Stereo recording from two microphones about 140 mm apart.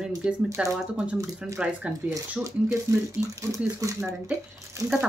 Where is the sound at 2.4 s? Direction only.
20° right (ahead or behind).